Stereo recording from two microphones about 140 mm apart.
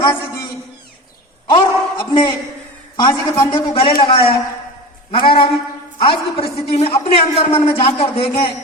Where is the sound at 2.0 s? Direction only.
35° left (ahead or behind).